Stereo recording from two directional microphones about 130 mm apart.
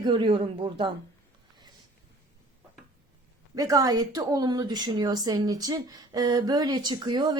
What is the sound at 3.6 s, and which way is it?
A woman's voice, 25° right (ahead or behind).